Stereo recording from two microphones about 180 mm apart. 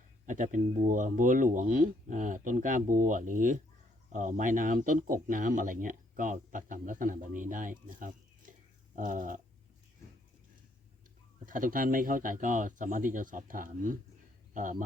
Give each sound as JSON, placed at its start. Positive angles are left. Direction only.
{"t": 0.3, "sound": "speech", "side_deg": -45}
{"t": 11.4, "sound": "speech", "side_deg": -50}